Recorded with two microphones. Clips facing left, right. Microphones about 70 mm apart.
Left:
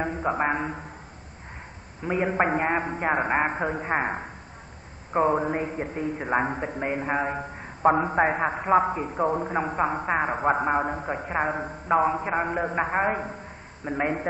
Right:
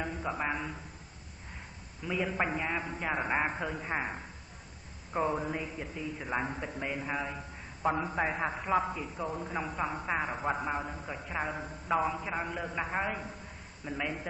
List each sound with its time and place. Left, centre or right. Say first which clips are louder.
0.0 s a man's voice: left 9 dB; left
2.0 s a man's voice: left 8 dB; left